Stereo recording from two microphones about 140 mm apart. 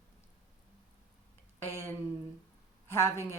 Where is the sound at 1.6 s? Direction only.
15° left (ahead or behind).